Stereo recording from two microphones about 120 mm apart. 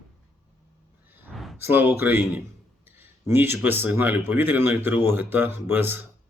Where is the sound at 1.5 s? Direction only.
20° right (ahead or behind).